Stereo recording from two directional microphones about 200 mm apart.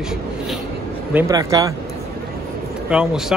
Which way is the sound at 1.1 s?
15° right (ahead or behind).